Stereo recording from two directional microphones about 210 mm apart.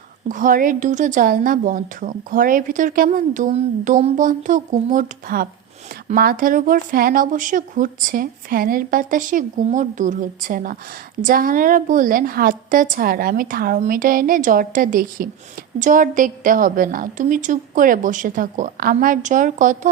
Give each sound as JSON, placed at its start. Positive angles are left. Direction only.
{"t": 0.3, "sound": "a woman's voice", "side_deg": -40}